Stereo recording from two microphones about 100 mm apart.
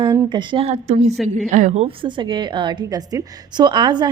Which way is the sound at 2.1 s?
50° right (ahead or behind).